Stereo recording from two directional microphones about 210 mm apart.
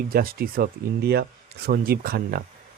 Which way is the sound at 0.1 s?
45° right (ahead or behind).